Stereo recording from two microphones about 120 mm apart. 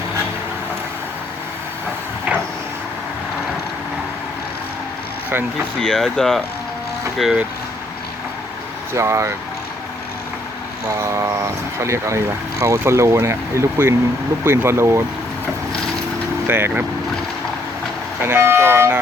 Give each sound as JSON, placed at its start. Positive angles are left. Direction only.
{"t": 5.8, "sound": "speech", "side_deg": 5}
{"t": 8.9, "sound": "speech", "side_deg": -25}
{"t": 10.8, "sound": "vehicle", "side_deg": -25}
{"t": 12.6, "sound": "speech", "side_deg": -25}
{"t": 16.5, "sound": "speech", "side_deg": -20}
{"t": 18.2, "sound": "speech", "side_deg": -20}